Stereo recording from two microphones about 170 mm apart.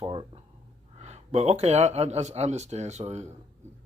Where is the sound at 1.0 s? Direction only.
40° right (ahead or behind).